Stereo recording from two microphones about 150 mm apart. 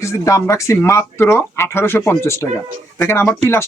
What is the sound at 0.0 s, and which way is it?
Speech, 20° left (ahead or behind).